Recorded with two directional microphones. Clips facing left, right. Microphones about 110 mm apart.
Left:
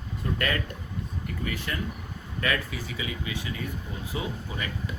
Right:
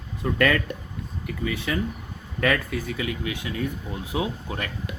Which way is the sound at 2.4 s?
60° right (ahead or behind).